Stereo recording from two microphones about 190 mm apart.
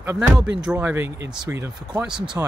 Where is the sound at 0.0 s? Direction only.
10° right (ahead or behind).